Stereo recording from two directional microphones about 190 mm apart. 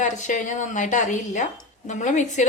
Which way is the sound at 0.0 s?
40° left (ahead or behind).